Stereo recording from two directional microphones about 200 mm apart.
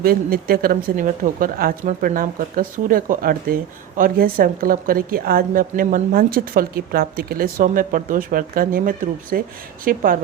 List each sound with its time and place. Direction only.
0.0 s speech: 50° right (ahead or behind)